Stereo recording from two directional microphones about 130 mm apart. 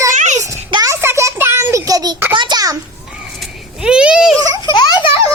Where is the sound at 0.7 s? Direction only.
30° right (ahead or behind).